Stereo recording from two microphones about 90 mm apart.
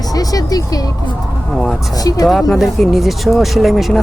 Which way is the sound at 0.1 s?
45° left (ahead or behind).